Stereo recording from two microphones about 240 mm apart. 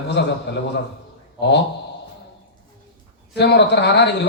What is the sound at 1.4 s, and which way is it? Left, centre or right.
Speech, left.